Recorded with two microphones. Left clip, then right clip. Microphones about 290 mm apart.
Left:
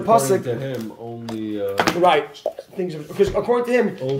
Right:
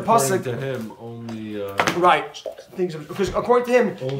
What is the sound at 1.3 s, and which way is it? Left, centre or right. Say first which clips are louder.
Speech: left 5 dB; left.